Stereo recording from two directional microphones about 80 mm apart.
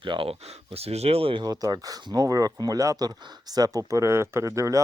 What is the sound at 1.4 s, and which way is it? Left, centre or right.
Speech, right.